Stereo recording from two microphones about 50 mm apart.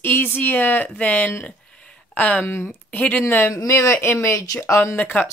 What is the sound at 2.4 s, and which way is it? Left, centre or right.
Speech, left.